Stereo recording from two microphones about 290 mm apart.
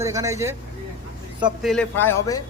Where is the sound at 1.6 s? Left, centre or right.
Centre.